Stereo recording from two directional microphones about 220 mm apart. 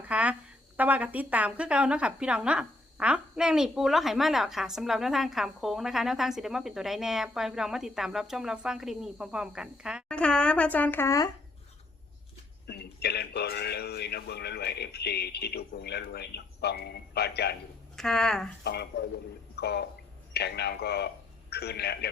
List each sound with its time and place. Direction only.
0.1 s a sound: 5° right (ahead or behind)
0.8 s a woman's voice: 5° right (ahead or behind); by 11.3 s 15° left (ahead or behind)
12.6 s speech: 45° left (ahead or behind)
17.9 s a woman's voice: centre (ahead or behind)
18.6 s speech: 50° left (ahead or behind)
19.5 s a sound: 50° left (ahead or behind)
20.3 s speech: 50° left (ahead or behind)